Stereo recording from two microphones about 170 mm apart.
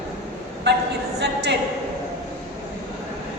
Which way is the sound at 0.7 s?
80° right.